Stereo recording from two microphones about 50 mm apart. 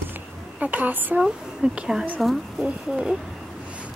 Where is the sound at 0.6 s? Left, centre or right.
Right.